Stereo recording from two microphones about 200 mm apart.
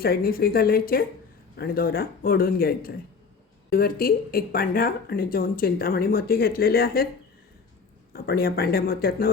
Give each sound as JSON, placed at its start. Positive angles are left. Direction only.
{"t": 0.0, "sound": "a woman's voice", "side_deg": 45}
{"t": 8.1, "sound": "a woman's voice", "side_deg": 50}